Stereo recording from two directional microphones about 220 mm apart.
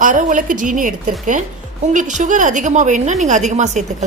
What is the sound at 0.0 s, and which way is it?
Speech, 35° right (ahead or behind).